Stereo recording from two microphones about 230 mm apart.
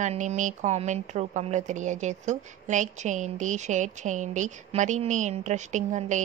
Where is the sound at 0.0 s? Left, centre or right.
Right.